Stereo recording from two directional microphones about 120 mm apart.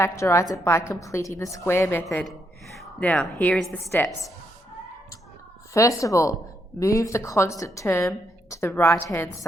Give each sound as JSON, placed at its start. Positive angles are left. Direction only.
{"t": 0.0, "sound": "a woman's voice", "side_deg": 25}
{"t": 3.9, "sound": "a woman's voice", "side_deg": 20}
{"t": 5.7, "sound": "a woman's voice", "side_deg": 25}